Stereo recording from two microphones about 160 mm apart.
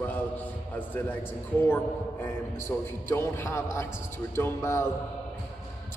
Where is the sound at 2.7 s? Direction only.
15° left (ahead or behind).